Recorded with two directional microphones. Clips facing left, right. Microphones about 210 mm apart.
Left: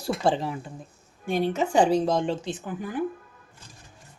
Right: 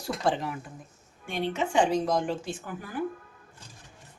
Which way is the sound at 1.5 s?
40° left (ahead or behind).